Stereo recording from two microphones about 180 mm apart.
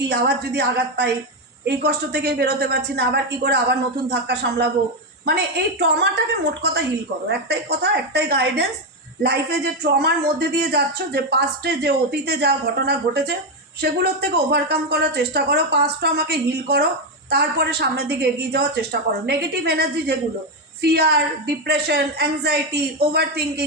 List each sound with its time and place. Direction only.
0.0 s a woman's voice: 70° right (ahead or behind)
5.8 s a woman's voice: 70° right (ahead or behind)